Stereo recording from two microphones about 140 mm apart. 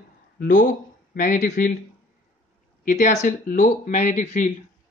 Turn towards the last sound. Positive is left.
turn(degrees=65)  # may be behind; listen again after turning